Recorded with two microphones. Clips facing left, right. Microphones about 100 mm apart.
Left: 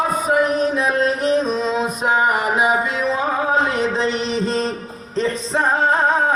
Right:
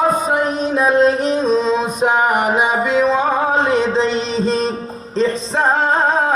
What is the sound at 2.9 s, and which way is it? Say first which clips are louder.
Music: right 7 dB; 75° right (ahead or behind).